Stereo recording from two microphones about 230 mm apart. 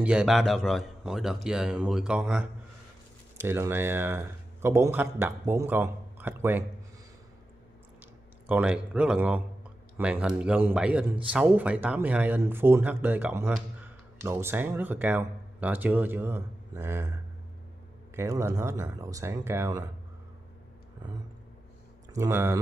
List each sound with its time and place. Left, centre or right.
0.0 s a man's voice: centre
8.0 s a man's voice: centre
22.1 s speech: centre